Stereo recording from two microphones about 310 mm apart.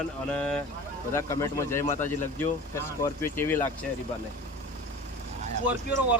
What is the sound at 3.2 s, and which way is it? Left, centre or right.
Speech, centre.